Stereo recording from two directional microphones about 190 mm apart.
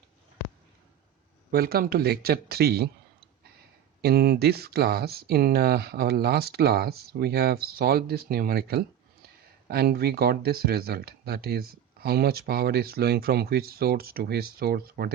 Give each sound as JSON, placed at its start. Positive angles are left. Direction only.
{"t": 1.5, "sound": "speech", "side_deg": -55}
{"t": 4.0, "sound": "speech", "side_deg": -55}